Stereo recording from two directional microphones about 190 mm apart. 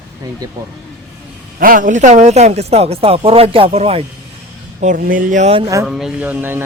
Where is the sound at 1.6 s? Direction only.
45° right (ahead or behind); by 4.0 s 30° right (ahead or behind).